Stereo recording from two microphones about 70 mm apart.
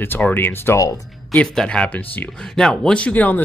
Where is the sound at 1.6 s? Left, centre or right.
Centre.